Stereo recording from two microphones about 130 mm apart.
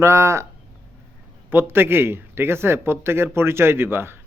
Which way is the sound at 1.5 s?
15° right (ahead or behind).